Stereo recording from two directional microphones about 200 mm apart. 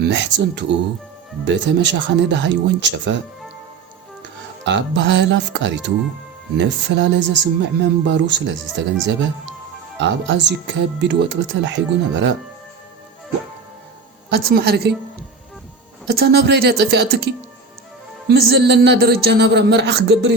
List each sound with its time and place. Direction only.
0.0 s speech: 60° right (ahead or behind)
4.6 s speech: 60° right (ahead or behind)
14.3 s a woman's voice: 55° right (ahead or behind)
16.0 s speech: 50° right (ahead or behind)